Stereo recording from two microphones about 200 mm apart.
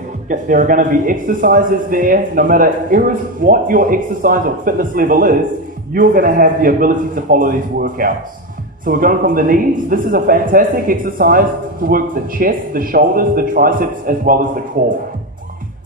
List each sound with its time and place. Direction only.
0.3 s a man's voice: 40° right (ahead or behind)